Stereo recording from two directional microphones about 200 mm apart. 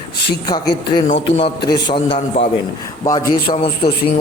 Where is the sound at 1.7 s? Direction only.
25° left (ahead or behind).